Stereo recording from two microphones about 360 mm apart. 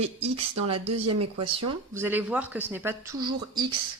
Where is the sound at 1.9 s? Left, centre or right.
Centre.